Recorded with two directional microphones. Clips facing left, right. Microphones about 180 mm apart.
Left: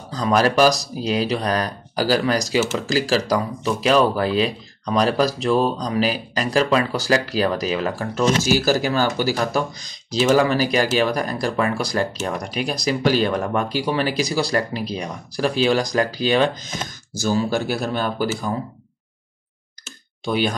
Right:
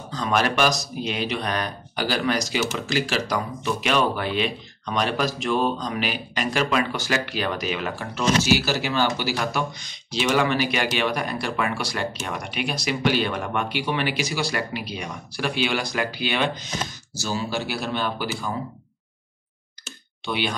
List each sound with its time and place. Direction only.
0.1 s speech: 35° left (ahead or behind)
20.2 s speech: 40° left (ahead or behind)